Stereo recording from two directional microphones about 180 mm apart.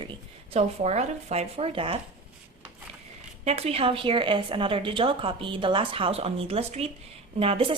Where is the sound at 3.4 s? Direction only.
35° right (ahead or behind).